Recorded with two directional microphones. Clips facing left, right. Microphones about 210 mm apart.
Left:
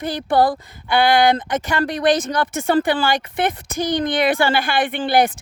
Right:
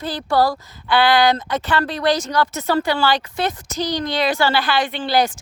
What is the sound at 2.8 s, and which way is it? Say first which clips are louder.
Speech: left 1 dB; 50° left (ahead or behind).